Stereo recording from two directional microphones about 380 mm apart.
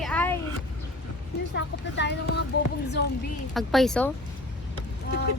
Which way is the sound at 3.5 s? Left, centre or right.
Centre.